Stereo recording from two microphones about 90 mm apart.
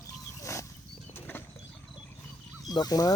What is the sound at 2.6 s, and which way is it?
Speech, 45° left (ahead or behind).